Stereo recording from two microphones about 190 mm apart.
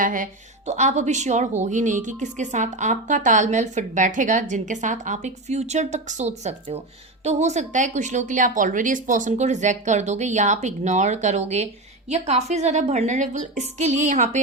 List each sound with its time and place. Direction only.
0.0 s speech: 45° right (ahead or behind)